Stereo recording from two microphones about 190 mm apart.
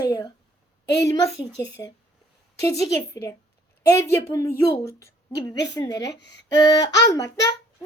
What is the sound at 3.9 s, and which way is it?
A woman's voice, 15° left (ahead or behind).